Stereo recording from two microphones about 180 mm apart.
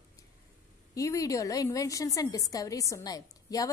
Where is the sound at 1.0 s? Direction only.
20° left (ahead or behind).